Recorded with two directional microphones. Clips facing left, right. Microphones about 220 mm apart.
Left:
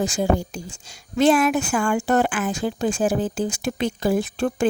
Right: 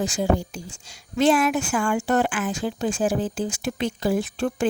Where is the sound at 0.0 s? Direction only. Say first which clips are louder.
Left 1 dB; 45° left (ahead or behind).